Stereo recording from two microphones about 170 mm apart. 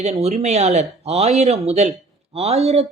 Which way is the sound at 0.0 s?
40° right (ahead or behind).